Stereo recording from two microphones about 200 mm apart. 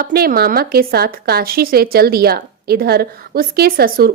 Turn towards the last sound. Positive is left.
turn(degrees=-50)  # may be behind; listen again after turning